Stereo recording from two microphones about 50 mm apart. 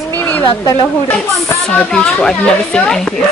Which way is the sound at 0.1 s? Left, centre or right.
Left.